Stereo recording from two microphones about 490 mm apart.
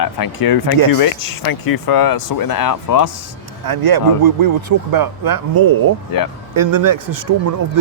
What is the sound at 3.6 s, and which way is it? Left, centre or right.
Speech, right.